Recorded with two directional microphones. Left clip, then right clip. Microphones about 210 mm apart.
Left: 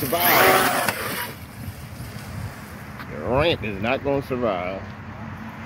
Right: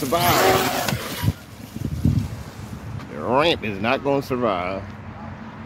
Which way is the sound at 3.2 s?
15° right (ahead or behind).